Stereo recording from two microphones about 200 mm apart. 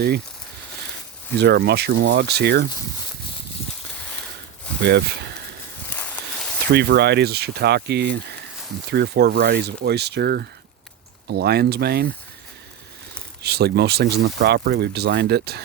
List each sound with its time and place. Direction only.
1.4 s speech: 55° right (ahead or behind)
4.8 s speech: 55° right (ahead or behind)
5.9 s a sound: 10° left (ahead or behind)
6.7 s speech: 55° right (ahead or behind)
13.4 s speech: 55° right (ahead or behind)